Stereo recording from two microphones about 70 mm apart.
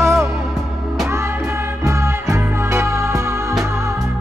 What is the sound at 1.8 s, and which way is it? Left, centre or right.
Music, right.